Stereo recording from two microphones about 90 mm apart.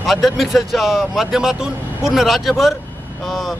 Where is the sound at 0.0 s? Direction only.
Centre (ahead or behind).